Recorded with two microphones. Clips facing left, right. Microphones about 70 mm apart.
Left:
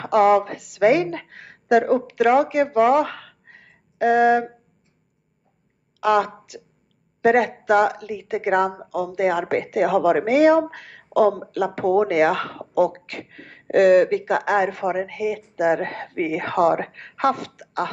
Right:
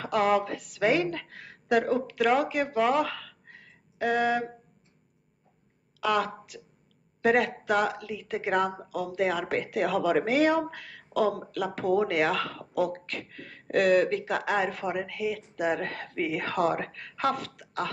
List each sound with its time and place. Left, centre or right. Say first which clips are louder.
0.0 s speech: left 8 dB; left
3.1 s a sound: left 3 dB; left
4.0 s speech: left 9 dB; left
5.9 s a woman's voice: left 8 dB; left
8.6 s speech: left 6 dB; centre
9.1 s a woman's voice: left 6 dB; left
12.8 s speech: left 6 dB; left
13.3 s speech: left 8 dB; left
15.4 s speech: left 8 dB; centre
15.8 s a woman's voice: left 6 dB; left
16.8 s a woman's voice: left 4 dB; left
17.2 s a woman's voice: left 7 dB; left